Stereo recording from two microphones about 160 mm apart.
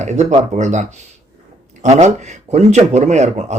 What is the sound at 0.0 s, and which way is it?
Speech, 45° right (ahead or behind).